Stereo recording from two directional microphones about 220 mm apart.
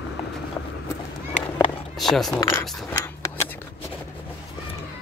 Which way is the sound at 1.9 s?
Centre (ahead or behind).